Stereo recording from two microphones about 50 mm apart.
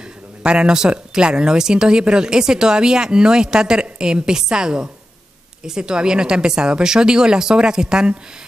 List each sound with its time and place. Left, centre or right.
0.4 s speech: centre